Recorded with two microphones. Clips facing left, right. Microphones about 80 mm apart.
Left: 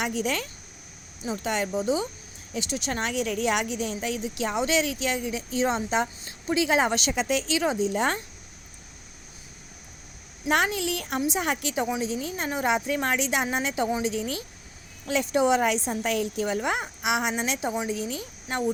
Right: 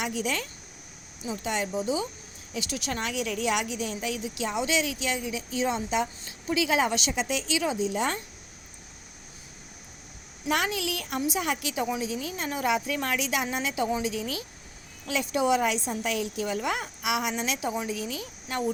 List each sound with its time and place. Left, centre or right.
0.0 s speech: left
1.5 s speech: left
2.6 s speech: left
10.5 s a woman's voice: left